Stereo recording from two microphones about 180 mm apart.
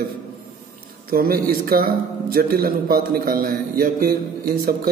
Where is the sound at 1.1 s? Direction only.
55° right (ahead or behind).